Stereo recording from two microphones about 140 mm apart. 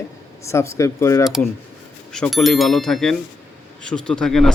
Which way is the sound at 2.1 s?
Centre (ahead or behind).